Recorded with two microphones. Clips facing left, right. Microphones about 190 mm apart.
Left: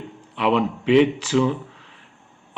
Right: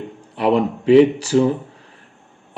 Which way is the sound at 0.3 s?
40° right (ahead or behind).